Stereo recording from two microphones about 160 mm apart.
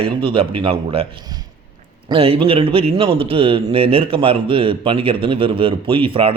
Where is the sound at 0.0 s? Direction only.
35° right (ahead or behind).